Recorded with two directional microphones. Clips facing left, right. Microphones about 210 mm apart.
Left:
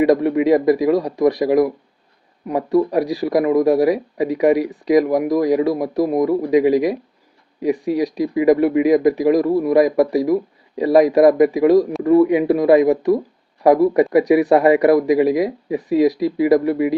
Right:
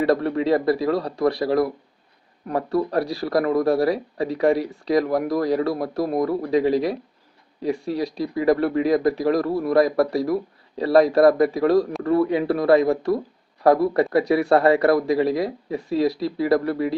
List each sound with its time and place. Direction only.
0.0 s speech: 15° left (ahead or behind)